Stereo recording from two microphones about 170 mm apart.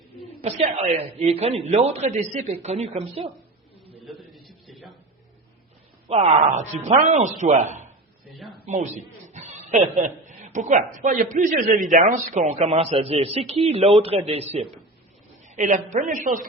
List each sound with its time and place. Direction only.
0.4 s a man's voice: 40° right (ahead or behind)
4.0 s a sound: centre (ahead or behind)
6.1 s a woman's voice: 40° right (ahead or behind)